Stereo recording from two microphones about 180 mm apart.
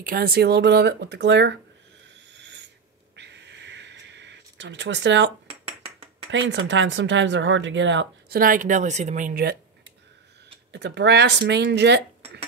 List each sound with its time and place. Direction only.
0.0 s speech: 60° right (ahead or behind)
2.3 s owl: 75° right (ahead or behind)
3.2 s a sound: 75° right (ahead or behind)
6.3 s speech: 90° right
8.4 s speech: 50° right (ahead or behind)
10.7 s speech: 75° right (ahead or behind)